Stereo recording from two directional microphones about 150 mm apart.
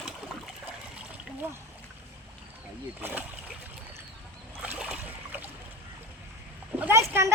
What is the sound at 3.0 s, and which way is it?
Speech, 10° right (ahead or behind).